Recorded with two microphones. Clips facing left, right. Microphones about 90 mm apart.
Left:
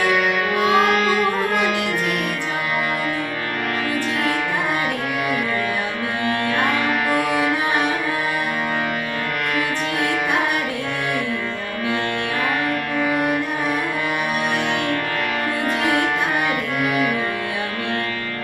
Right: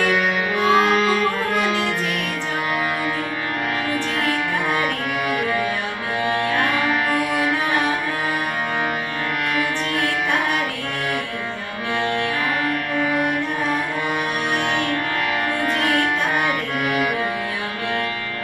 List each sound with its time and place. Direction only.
0.1 s music: 5° left (ahead or behind)
15.6 s music: 20° left (ahead or behind)
16.8 s music: centre (ahead or behind)